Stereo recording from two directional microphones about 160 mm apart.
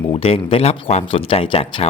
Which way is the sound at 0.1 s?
35° left (ahead or behind).